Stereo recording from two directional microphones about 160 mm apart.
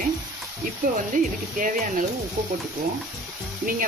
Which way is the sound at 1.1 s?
55° right (ahead or behind).